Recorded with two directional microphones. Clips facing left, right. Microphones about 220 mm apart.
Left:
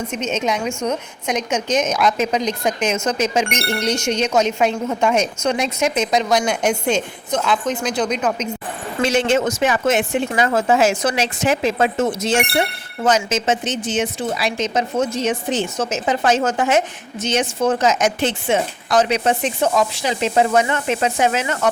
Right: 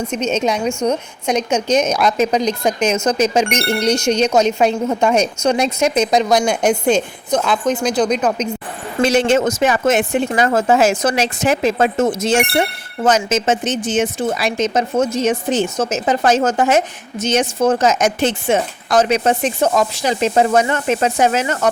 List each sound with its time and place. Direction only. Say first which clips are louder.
0.2 s a woman's voice: right 3 dB; 35° right (ahead or behind)